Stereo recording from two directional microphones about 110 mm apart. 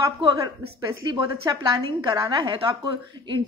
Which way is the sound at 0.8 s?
40° right (ahead or behind).